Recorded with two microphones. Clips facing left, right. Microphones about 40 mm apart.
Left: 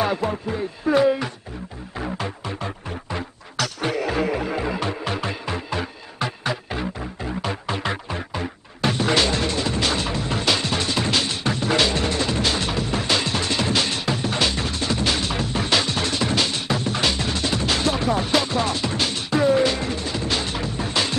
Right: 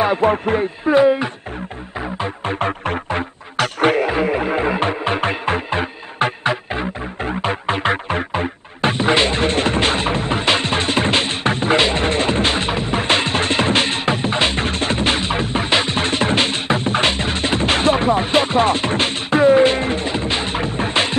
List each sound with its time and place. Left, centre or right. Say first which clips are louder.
0.2 s music: right 9 dB; right
0.8 s speech: right 4 dB; right
2.0 s music: right 3 dB; right
2.2 s music: right 8 dB; right
4.1 s music: right 5 dB; right